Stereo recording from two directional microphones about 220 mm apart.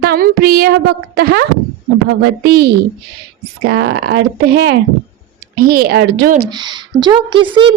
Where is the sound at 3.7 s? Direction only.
55° right (ahead or behind).